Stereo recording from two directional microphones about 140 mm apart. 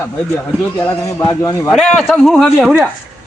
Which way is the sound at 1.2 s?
25° left (ahead or behind).